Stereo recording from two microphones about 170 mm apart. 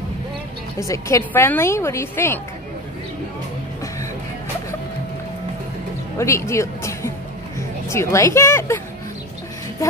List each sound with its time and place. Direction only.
0.7 s a woman's voice: 20° left (ahead or behind)
6.1 s a woman's voice: 15° left (ahead or behind)